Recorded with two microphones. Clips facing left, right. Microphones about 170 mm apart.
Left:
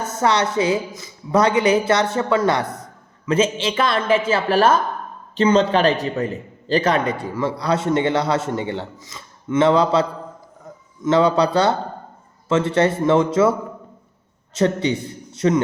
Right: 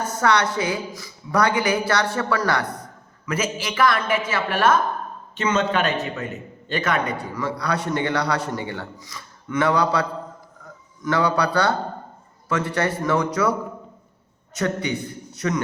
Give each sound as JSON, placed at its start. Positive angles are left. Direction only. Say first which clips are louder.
{"t": 0.1, "sound": "a man's voice", "louder": "left 2 dB", "side_deg": 25}